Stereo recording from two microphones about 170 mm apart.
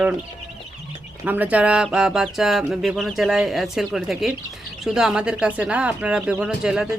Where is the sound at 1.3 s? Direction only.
10° right (ahead or behind).